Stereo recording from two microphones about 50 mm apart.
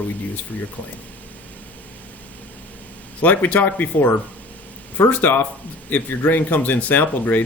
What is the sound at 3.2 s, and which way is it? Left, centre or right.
Speech, left.